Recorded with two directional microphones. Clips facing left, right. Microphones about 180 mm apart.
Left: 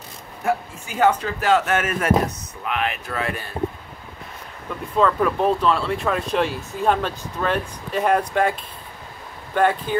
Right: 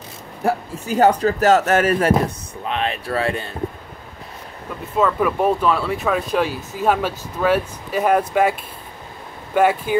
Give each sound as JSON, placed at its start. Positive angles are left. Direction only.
{"t": 0.4, "sound": "speech", "side_deg": -35}
{"t": 4.9, "sound": "speech", "side_deg": -5}